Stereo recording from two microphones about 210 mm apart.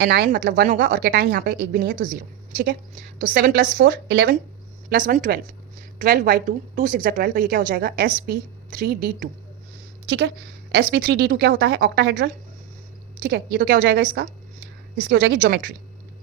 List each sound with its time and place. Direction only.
0.0 s a woman's voice: 50° right (ahead or behind)